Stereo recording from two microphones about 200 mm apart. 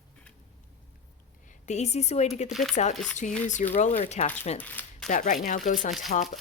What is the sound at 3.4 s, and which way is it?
Speech, 35° left (ahead or behind).